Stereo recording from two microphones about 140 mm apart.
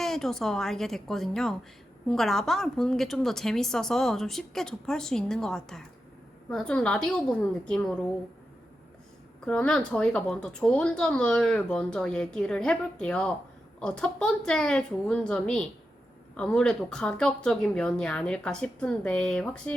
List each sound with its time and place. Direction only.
0.0 s a woman's voice: 5° left (ahead or behind)
9.5 s speech: 5° left (ahead or behind)